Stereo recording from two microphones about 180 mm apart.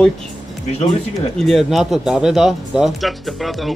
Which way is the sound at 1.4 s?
Centre (ahead or behind).